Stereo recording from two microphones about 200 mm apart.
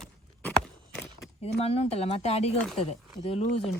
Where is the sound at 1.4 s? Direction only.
30° left (ahead or behind).